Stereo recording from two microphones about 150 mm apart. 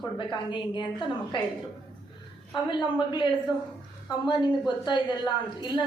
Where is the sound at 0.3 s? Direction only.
30° left (ahead or behind).